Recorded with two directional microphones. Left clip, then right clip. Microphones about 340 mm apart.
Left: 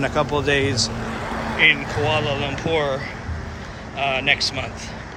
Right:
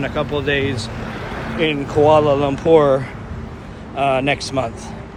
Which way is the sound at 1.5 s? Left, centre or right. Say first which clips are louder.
Even; centre.